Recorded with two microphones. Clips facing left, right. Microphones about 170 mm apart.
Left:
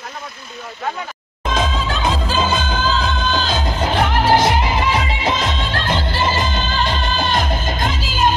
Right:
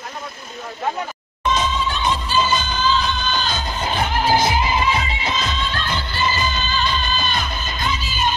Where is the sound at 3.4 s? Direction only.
90° left.